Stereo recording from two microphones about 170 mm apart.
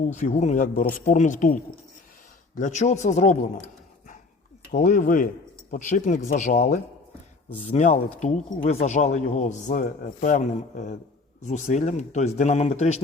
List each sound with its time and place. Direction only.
0.1 s speech: 40° left (ahead or behind)
2.6 s speech: 45° left (ahead or behind)
4.7 s speech: 45° left (ahead or behind)